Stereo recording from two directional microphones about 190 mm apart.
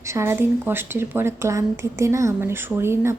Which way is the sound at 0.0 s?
15° right (ahead or behind).